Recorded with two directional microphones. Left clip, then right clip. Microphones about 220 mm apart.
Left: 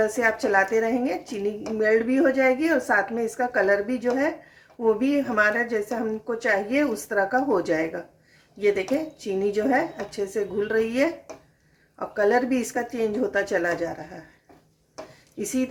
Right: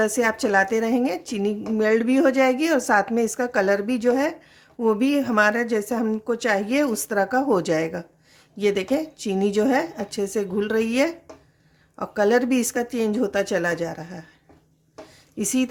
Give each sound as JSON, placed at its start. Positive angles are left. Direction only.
{"t": 0.0, "sound": "a woman's voice", "side_deg": -45}
{"t": 15.4, "sound": "a woman's voice", "side_deg": -45}